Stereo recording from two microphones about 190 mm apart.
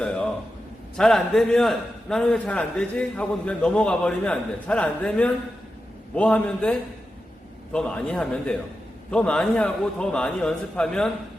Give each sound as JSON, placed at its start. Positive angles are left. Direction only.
{"t": 0.9, "sound": "a man's voice", "side_deg": 0}